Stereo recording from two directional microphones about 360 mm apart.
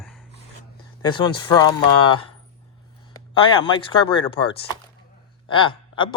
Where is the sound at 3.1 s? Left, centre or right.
Centre.